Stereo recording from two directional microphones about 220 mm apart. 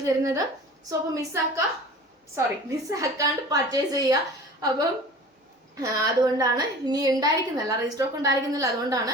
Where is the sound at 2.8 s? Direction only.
15° right (ahead or behind).